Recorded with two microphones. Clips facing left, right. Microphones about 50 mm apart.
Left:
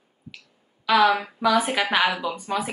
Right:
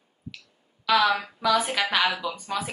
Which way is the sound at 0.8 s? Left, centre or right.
Centre.